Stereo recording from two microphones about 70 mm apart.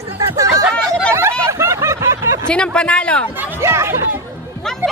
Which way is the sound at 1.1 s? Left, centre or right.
Right.